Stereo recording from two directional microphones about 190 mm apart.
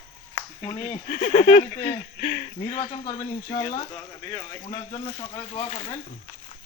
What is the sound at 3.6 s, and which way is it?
Speech, 20° left (ahead or behind).